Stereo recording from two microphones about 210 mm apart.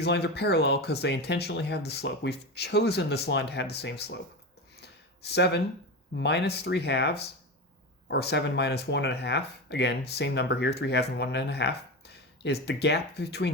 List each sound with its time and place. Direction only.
0.0 s speech: 50° left (ahead or behind)
4.8 s a sound: 50° left (ahead or behind)
6.1 s speech: 50° left (ahead or behind)